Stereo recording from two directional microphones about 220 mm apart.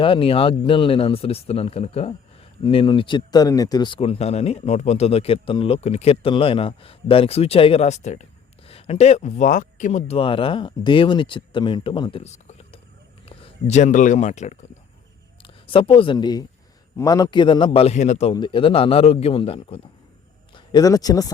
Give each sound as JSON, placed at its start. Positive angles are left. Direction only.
{"t": 0.0, "sound": "speech", "side_deg": 25}